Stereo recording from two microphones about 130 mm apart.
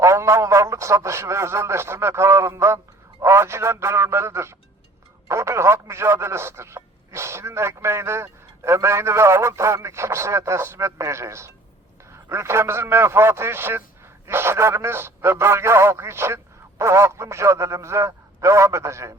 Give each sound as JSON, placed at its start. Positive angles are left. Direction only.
{"t": 0.0, "sound": "speech", "side_deg": -25}